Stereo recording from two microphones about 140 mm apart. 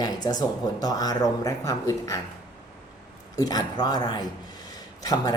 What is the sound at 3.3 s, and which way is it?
A woman's voice, 30° left (ahead or behind).